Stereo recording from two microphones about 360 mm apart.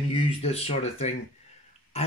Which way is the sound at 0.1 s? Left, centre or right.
Centre.